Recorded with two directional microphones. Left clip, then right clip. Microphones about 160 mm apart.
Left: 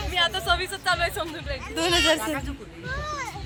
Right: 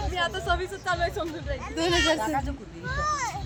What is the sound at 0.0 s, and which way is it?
Speech, 25° right (ahead or behind).